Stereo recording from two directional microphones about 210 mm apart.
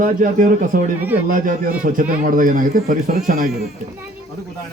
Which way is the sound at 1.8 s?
40° right (ahead or behind).